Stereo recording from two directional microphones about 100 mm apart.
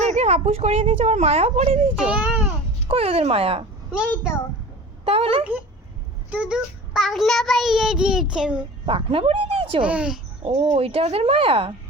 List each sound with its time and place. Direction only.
0.2 s speech: 90° right
2.0 s a child's voice: 10° right (ahead or behind)
2.8 s speech: 80° right
5.0 s speech: 75° right (ahead or behind)
6.3 s a sound: 10° right (ahead or behind)
7.0 s child singing: centre (ahead or behind)
8.9 s speech: 65° right (ahead or behind)
9.8 s a child's voice: 10° right (ahead or behind)
10.4 s speech: 90° right; by 11.7 s 70° right (ahead or behind)